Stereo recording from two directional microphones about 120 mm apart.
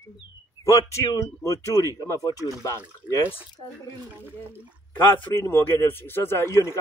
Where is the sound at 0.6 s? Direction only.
25° left (ahead or behind).